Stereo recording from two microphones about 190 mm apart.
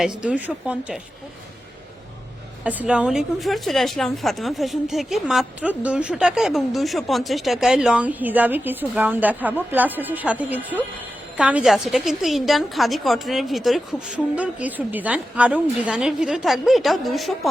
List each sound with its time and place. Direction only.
0.2 s speech: 5° right (ahead or behind)
2.6 s a woman's voice: 5° right (ahead or behind)